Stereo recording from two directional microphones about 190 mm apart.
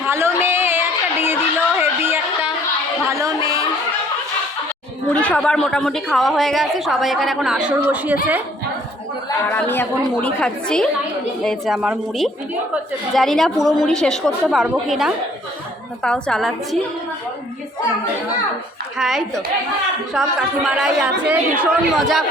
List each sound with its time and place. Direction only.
0.0 s a sound: 15° right (ahead or behind)
5.1 s a woman's voice: 5° left (ahead or behind)
9.5 s a woman's voice: 10° left (ahead or behind)
18.9 s a woman's voice: centre (ahead or behind)
20.7 s a woman's voice: centre (ahead or behind)